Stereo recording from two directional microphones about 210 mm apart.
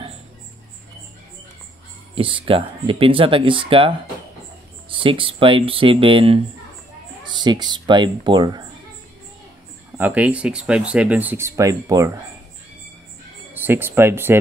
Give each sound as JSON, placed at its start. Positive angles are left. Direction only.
{"t": 2.1, "sound": "speech", "side_deg": -25}
{"t": 9.9, "sound": "speech", "side_deg": -5}
{"t": 13.5, "sound": "speech", "side_deg": -10}